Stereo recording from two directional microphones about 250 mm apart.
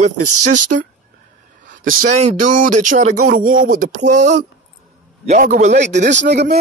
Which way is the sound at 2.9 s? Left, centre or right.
Right.